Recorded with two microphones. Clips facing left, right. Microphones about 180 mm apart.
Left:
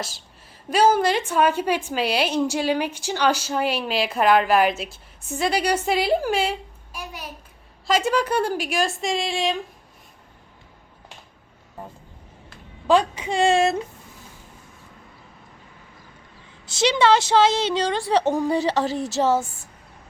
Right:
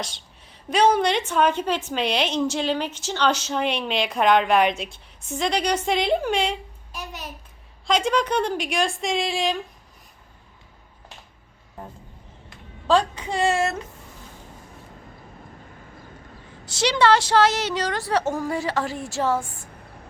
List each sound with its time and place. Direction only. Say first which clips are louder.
0.7 s a woman's voice: left 1 dB; 5° left (ahead or behind)
12.9 s a woman's voice: left 2 dB; 15° left (ahead or behind)
16.7 s a woman's voice: left 1 dB; 20° left (ahead or behind)